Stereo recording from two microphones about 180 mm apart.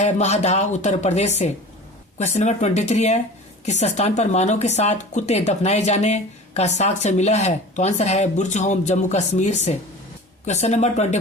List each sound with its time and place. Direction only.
0.0 s speech: 40° left (ahead or behind)